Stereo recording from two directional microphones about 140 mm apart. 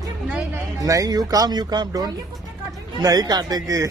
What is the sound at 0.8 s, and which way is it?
Speech, 25° right (ahead or behind).